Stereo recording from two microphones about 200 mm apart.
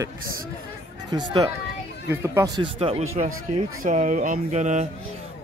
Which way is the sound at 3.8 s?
40° right (ahead or behind).